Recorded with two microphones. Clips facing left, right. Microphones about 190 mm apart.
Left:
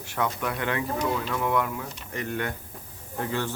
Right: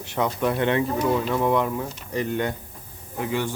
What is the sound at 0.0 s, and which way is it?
Speech, 20° right (ahead or behind).